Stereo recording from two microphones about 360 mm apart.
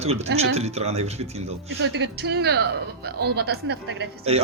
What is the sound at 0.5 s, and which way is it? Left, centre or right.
Speech, centre.